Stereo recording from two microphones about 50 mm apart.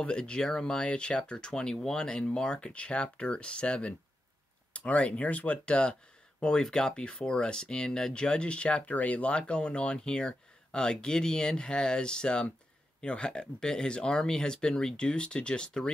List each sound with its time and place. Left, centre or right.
0.0 s speech: centre